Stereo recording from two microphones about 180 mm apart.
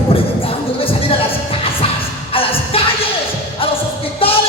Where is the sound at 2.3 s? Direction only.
30° left (ahead or behind).